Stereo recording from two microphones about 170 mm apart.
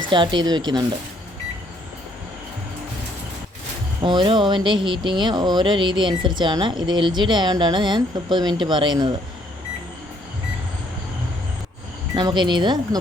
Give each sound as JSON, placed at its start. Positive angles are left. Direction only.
{"t": 0.1, "sound": "speech", "side_deg": -30}
{"t": 4.0, "sound": "speech", "side_deg": -30}
{"t": 12.1, "sound": "speech", "side_deg": -25}